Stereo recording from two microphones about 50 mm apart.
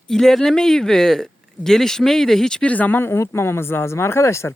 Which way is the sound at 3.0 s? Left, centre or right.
Left.